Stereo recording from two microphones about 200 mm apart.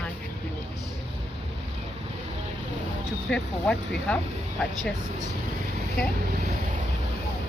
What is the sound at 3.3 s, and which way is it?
Speech, 5° left (ahead or behind).